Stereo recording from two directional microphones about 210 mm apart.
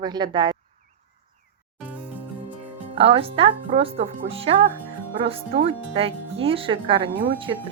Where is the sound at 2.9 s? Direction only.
25° right (ahead or behind).